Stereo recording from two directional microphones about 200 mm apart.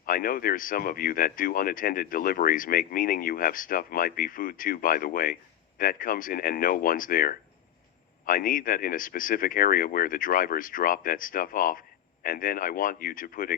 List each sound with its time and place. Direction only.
0.0 s speech: 45° left (ahead or behind)